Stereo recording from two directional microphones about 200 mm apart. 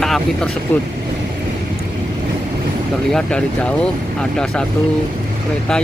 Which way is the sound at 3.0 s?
5° left (ahead or behind).